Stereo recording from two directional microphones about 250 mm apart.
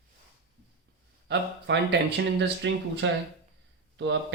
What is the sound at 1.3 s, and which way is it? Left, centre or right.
Speech, right.